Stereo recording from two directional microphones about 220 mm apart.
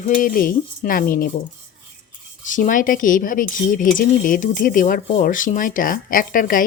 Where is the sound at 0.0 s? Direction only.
40° left (ahead or behind).